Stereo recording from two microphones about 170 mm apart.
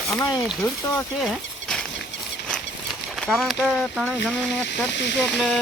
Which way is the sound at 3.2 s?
Centre (ahead or behind).